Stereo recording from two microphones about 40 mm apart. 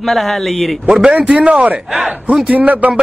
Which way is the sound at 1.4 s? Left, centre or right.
Right.